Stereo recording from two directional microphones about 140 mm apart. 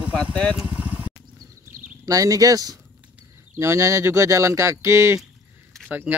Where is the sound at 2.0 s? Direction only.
25° right (ahead or behind).